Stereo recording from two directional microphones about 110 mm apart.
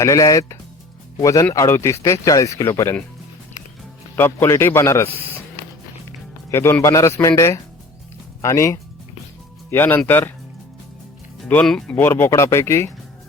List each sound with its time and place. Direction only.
0.0 s speech: 30° left (ahead or behind)
4.1 s speech: 20° left (ahead or behind)
6.5 s speech: 25° left (ahead or behind)
11.6 s speech: 5° left (ahead or behind)
11.9 s speech: 20° left (ahead or behind)